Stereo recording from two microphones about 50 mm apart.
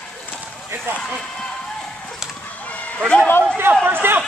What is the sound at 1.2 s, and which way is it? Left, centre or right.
Run, centre.